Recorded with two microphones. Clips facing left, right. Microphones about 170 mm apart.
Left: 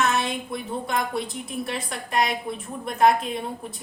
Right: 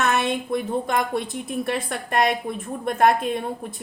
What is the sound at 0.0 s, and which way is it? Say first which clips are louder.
A woman's voice: right 2 dB; 55° right (ahead or behind).